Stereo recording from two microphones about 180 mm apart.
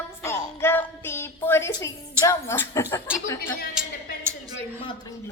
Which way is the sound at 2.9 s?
15° left (ahead or behind).